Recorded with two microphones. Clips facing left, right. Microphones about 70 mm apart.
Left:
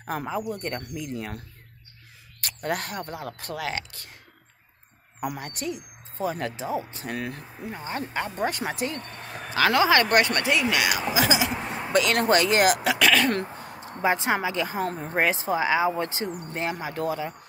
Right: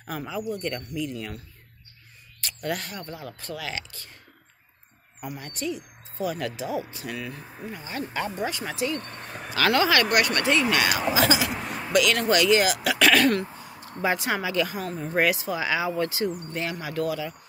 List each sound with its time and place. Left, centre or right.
0.0 s speech: left
2.6 s speech: left
5.4 s speech: left
6.1 s speech: left
7.2 s speech: left
7.7 s speech: left
9.0 s speech: centre
9.6 s speech: centre
10.6 s speech: centre; by 12.8 s left
13.0 s speech: centre
13.4 s a sound: left
13.7 s speech: left